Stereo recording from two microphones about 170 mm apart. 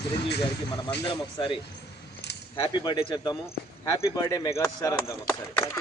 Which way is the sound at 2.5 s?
30° left (ahead or behind).